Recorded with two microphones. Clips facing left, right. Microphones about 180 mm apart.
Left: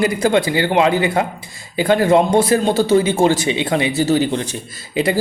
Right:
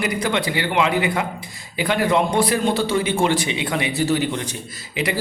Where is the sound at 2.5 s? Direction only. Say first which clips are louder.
Left 6 dB; 40° left (ahead or behind).